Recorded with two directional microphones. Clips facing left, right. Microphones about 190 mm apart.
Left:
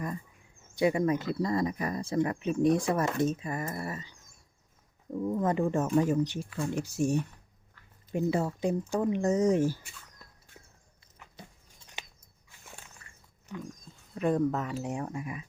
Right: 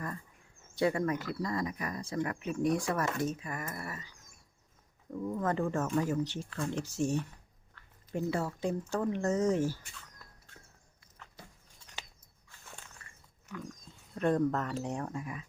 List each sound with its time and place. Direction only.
0.8 s speech: 15° left (ahead or behind)
5.1 s speech: 20° left (ahead or behind)
11.4 s a sound: 20° left (ahead or behind)
12.5 s walk: 15° left (ahead or behind)
14.1 s speech: 5° left (ahead or behind)